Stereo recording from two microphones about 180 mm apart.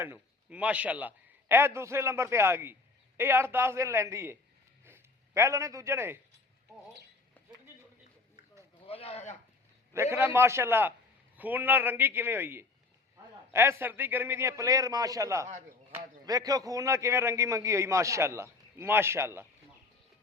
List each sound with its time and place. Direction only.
0.0 s a man's voice: 10° right (ahead or behind)
8.9 s a sound: 30° left (ahead or behind)
9.9 s a man's voice: 15° right (ahead or behind)